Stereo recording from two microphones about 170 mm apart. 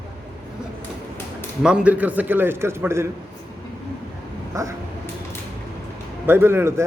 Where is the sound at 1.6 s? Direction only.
5° right (ahead or behind).